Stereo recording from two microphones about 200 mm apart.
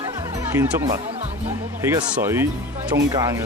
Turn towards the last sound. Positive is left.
turn(degrees=-15)  # may be behind; listen again after turning